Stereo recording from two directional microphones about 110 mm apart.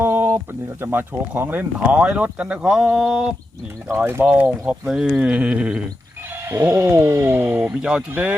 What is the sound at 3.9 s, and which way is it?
Speech, 20° right (ahead or behind).